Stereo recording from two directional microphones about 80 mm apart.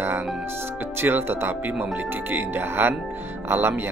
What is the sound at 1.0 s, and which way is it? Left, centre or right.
Speech, right.